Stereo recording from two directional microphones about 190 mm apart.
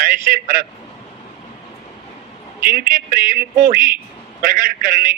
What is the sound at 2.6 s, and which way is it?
A man's voice, 50° right (ahead or behind).